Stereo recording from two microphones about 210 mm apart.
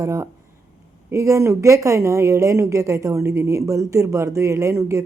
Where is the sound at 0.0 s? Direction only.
15° right (ahead or behind).